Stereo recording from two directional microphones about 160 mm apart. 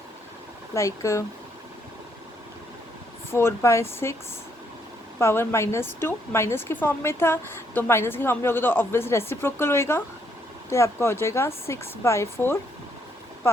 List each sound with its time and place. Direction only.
0.7 s speech: 20° left (ahead or behind)
3.3 s a woman's voice: 15° left (ahead or behind)
5.2 s a woman's voice: 15° left (ahead or behind)